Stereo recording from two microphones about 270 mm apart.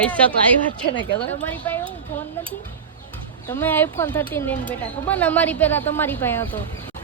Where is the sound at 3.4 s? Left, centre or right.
Centre.